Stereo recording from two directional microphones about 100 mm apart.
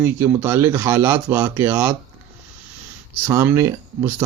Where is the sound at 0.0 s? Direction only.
20° right (ahead or behind).